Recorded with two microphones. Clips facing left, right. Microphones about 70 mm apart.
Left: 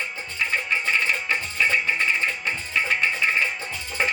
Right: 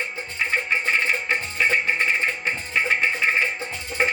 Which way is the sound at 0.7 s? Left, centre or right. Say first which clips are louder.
Right 1 dB; right.